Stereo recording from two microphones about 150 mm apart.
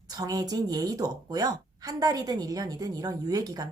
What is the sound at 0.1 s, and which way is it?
A woman's voice, 25° right (ahead or behind).